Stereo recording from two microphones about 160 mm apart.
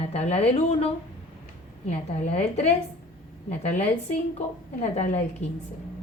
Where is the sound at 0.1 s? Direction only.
40° left (ahead or behind).